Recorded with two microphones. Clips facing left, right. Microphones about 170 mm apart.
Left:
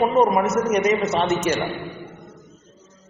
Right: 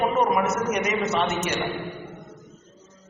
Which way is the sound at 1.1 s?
30° left (ahead or behind).